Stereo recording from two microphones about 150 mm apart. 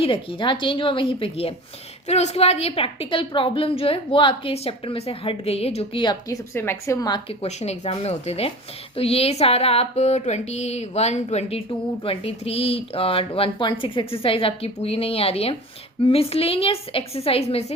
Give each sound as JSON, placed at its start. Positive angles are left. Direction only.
{"t": 0.0, "sound": "a woman's voice", "side_deg": 35}
{"t": 7.3, "sound": "a sound", "side_deg": 45}
{"t": 12.0, "sound": "a woman's voice", "side_deg": 40}